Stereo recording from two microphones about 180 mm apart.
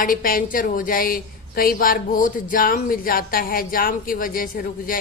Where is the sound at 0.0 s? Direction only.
50° left (ahead or behind).